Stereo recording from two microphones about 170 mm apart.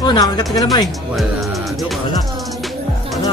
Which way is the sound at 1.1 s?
Centre (ahead or behind).